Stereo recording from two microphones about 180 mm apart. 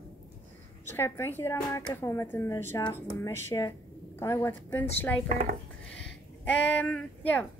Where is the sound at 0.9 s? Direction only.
10° left (ahead or behind).